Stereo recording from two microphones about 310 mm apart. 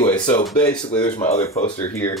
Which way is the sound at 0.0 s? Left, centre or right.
Centre.